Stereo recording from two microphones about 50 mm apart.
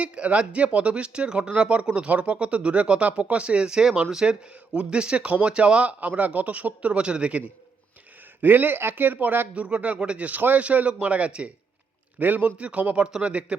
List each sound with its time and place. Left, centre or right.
0.0 s speech: right
8.4 s speech: right
9.1 s a man's voice: right
12.2 s a man's voice: right